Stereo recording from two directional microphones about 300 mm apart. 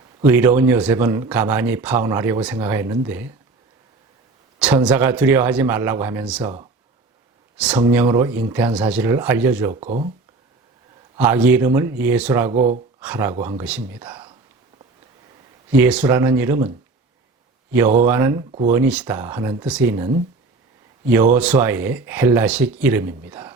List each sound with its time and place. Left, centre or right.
0.3 s speech: centre
4.6 s speech: centre
7.5 s speech: centre
9.8 s speech: right
11.2 s speech: centre
12.5 s speech: right
13.0 s speech: centre
15.7 s speech: centre
21.3 s speech: centre